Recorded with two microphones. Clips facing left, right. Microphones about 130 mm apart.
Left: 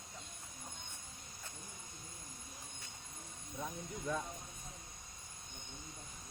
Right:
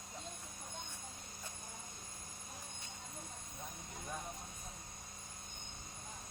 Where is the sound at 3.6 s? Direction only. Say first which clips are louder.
Left 8 dB; 90° left.